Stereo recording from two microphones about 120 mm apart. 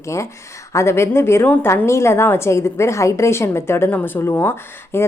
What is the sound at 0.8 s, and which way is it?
A woman's voice, 25° left (ahead or behind).